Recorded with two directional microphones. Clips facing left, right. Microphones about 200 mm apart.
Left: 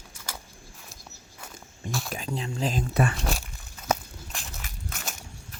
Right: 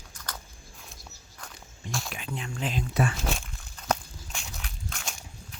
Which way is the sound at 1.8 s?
50° left (ahead or behind).